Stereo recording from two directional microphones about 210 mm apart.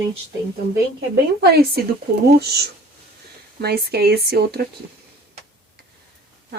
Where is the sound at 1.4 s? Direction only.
50° right (ahead or behind).